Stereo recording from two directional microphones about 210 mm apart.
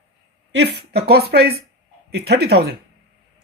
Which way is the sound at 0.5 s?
50° right (ahead or behind).